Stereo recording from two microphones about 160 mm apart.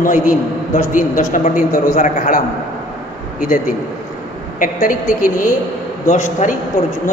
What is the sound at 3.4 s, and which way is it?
A man's voice, 60° left (ahead or behind).